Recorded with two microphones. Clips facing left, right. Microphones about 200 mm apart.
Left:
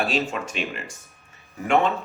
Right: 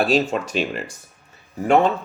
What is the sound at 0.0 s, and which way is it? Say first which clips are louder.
Speech: right 6 dB; 35° right (ahead or behind).